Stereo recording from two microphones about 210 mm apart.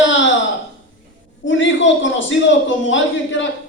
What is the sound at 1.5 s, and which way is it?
A man's voice, 65° left (ahead or behind).